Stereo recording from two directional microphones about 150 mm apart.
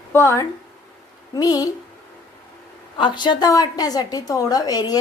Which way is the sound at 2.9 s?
30° left (ahead or behind).